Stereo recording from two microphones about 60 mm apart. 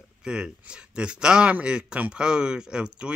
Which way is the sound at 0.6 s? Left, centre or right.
Centre.